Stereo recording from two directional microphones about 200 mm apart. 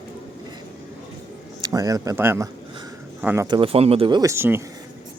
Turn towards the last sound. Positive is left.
turn(degrees=-10)  # may be behind; listen again after turning